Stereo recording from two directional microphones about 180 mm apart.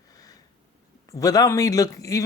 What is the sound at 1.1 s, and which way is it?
Speech, 20° left (ahead or behind).